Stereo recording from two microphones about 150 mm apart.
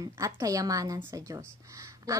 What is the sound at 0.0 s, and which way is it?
A woman's voice, 20° right (ahead or behind).